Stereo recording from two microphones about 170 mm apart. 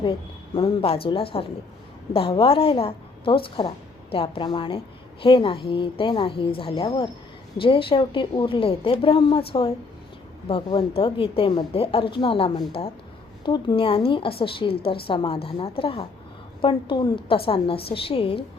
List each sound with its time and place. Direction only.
0.0 s a woman's voice: 30° left (ahead or behind)